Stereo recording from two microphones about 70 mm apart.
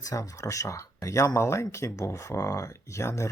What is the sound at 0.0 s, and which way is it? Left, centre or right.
Speech, left.